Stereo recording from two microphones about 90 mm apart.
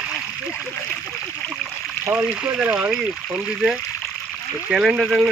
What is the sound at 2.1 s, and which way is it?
Speech, 15° right (ahead or behind).